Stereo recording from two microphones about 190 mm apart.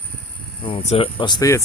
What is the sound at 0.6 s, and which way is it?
Speech, 30° left (ahead or behind).